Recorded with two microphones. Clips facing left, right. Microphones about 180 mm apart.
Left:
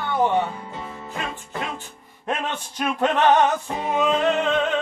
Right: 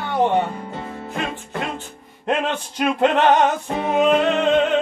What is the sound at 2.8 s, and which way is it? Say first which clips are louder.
Male singing: right 4 dB; 15° right (ahead or behind).